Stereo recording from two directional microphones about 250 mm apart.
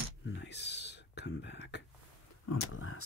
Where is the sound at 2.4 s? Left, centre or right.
Left.